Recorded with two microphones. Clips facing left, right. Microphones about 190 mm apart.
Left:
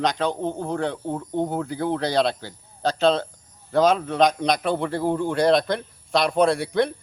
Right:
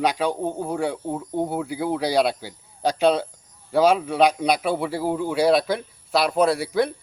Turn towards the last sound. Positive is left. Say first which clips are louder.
# even
turn(degrees=-5)  # may be behind; listen again after turning